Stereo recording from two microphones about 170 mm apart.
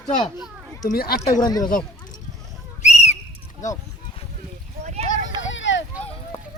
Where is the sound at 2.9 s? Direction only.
40° left (ahead or behind).